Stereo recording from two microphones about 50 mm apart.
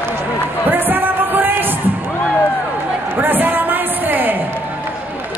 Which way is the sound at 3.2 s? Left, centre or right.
Right.